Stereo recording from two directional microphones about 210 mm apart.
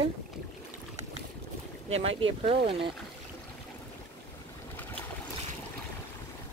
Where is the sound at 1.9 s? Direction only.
30° right (ahead or behind).